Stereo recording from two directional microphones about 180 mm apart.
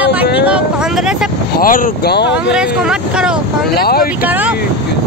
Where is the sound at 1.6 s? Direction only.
50° left (ahead or behind); by 2.5 s 70° left (ahead or behind).